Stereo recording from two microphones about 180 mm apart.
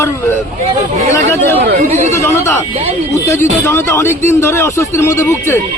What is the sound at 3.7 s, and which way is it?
Speech, 15° left (ahead or behind).